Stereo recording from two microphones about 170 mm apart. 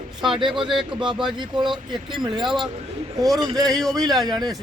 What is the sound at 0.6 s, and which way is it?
Speech, 30° right (ahead or behind).